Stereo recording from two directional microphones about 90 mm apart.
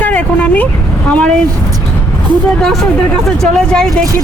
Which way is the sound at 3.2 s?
5° left (ahead or behind).